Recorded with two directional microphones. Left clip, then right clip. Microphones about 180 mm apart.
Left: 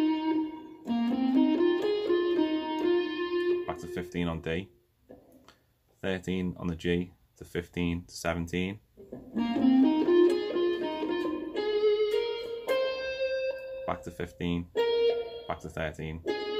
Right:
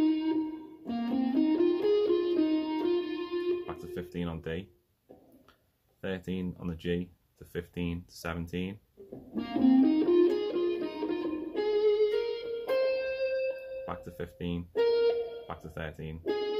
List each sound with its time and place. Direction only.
0.0 s music: 35° right (ahead or behind)
3.6 s speech: 10° left (ahead or behind)
5.9 s speech: 10° left (ahead or behind)
9.3 s music: 35° right (ahead or behind)
13.8 s speech: 10° left (ahead or behind)
14.9 s music: 35° right (ahead or behind)
15.4 s speech: 10° left (ahead or behind)